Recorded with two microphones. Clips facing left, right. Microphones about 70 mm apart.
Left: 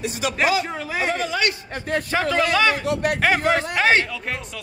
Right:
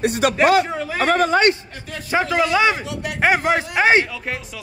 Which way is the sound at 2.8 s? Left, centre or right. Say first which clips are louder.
Left 6 dB; left.